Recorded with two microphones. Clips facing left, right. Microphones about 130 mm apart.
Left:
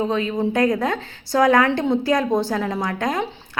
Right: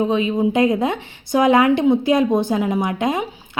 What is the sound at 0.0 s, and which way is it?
A woman's voice, 15° right (ahead or behind).